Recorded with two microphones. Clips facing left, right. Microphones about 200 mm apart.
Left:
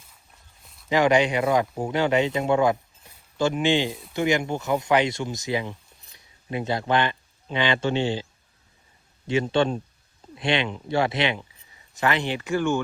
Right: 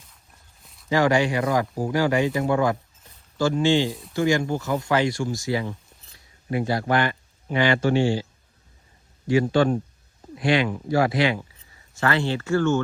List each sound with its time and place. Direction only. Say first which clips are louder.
0.9 s speech: even; 20° left (ahead or behind)